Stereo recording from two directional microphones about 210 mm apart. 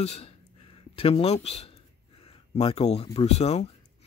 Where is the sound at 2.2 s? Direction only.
25° left (ahead or behind).